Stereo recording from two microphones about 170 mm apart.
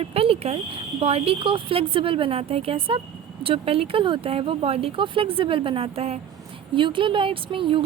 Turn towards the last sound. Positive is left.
turn(degrees=-30)  # may be behind; listen again after turning